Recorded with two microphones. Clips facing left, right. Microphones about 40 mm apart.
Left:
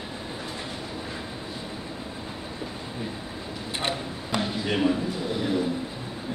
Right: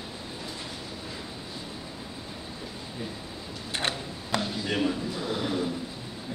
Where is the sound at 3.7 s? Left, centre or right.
Centre.